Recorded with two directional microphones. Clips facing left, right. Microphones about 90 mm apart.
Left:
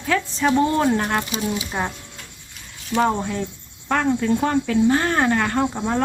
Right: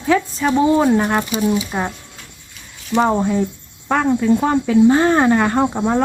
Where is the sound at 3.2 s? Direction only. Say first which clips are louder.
Right 8 dB; 15° right (ahead or behind).